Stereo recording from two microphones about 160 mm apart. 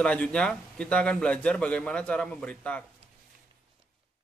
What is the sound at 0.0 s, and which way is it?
Speech, 5° left (ahead or behind).